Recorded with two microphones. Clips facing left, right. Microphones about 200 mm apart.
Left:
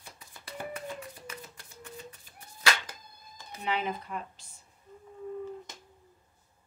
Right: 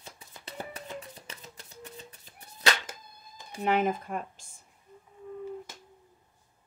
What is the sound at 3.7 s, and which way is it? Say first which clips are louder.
Speech: right 6 dB; 45° right (ahead or behind).